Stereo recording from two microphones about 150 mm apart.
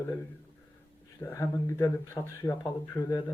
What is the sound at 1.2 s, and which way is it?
Speech, 20° left (ahead or behind).